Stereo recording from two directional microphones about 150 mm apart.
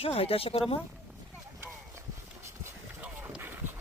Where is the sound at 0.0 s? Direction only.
40° left (ahead or behind).